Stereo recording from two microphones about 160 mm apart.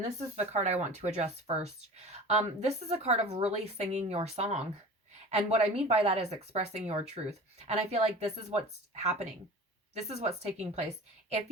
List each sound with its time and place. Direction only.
0.0 s speech: 45° right (ahead or behind)